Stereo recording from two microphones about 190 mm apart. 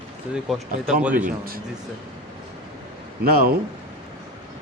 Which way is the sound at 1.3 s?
50° right (ahead or behind).